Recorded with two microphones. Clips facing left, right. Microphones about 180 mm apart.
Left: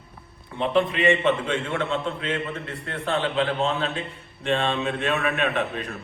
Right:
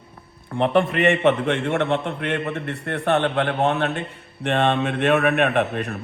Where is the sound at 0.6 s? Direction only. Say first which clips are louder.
Right 3 dB; 60° right (ahead or behind).